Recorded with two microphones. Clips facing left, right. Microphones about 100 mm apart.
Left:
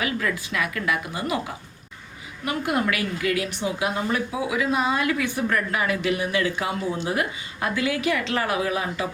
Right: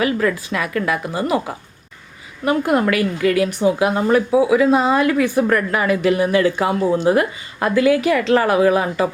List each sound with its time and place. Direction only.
0.0 s a woman's voice: 45° right (ahead or behind)
2.4 s speech: 45° right (ahead or behind)
4.4 s a woman's voice: 35° right (ahead or behind)